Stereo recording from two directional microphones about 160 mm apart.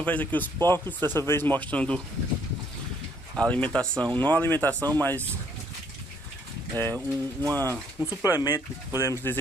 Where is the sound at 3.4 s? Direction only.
10° left (ahead or behind).